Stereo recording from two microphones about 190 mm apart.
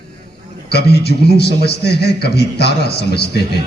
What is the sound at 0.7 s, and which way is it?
A man's voice, 60° left (ahead or behind).